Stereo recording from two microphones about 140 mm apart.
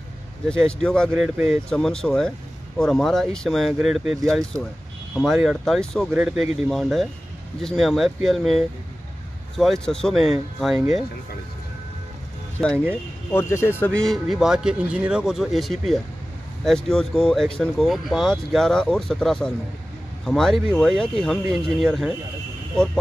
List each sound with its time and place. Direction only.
0.5 s speech: 5° left (ahead or behind)
6.1 s speech: 10° right (ahead or behind)
12.5 s speech: 5° left (ahead or behind)
13.3 s speech: 20° left (ahead or behind)
14.0 s speech: centre (ahead or behind)